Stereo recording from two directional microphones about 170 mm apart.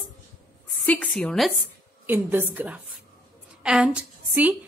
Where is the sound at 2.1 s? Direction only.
10° right (ahead or behind).